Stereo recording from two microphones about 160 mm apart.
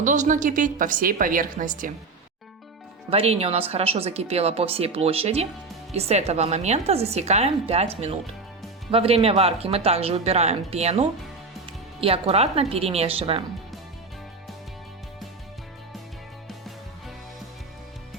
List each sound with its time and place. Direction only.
0.0 s a woman's voice: 55° right (ahead or behind)
3.1 s a woman's voice: 40° right (ahead or behind)